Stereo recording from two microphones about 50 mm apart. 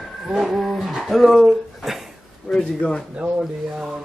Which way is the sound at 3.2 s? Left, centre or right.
Centre.